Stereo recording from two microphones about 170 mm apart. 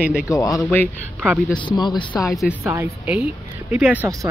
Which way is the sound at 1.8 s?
25° left (ahead or behind).